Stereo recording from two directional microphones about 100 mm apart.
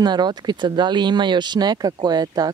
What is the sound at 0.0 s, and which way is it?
Speech, 45° right (ahead or behind).